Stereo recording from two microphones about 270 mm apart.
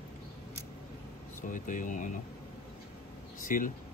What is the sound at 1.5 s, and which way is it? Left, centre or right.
Speech, left.